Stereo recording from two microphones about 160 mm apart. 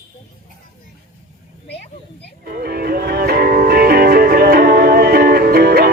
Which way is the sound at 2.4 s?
75° right (ahead or behind).